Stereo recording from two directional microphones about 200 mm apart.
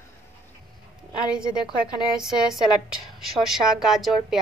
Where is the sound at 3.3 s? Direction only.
Centre (ahead or behind).